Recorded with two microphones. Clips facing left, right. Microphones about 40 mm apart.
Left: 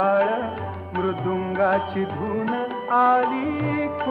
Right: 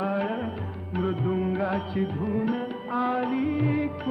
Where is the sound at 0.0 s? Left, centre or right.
Left.